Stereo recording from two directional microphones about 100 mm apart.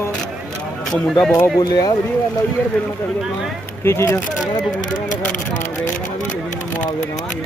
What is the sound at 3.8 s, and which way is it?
Speech, 25° left (ahead or behind).